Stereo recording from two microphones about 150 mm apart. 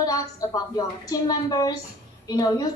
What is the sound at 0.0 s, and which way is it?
A woman's voice, 25° left (ahead or behind).